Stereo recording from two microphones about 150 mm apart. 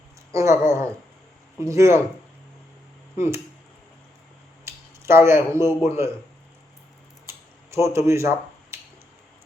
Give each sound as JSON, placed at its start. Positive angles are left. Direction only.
{"t": 0.3, "sound": "speech", "side_deg": -20}
{"t": 3.2, "sound": "speech", "side_deg": -15}
{"t": 4.6, "sound": "speech", "side_deg": -15}
{"t": 7.3, "sound": "a sound", "side_deg": -20}
{"t": 7.9, "sound": "speech", "side_deg": -20}